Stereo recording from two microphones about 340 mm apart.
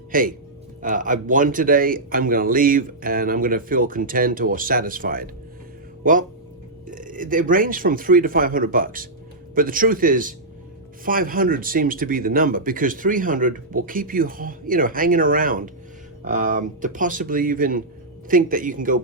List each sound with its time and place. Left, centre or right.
0.1 s speech: right